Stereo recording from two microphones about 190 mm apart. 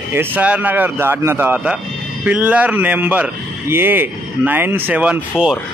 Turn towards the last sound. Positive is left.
turn(degrees=-5)  # may be behind; listen again after turning